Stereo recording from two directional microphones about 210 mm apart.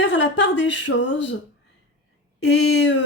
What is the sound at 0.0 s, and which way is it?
Speech, 60° left (ahead or behind).